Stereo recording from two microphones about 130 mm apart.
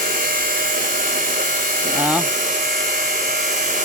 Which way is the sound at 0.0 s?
90° right.